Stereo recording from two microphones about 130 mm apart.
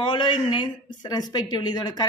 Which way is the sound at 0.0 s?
40° left (ahead or behind).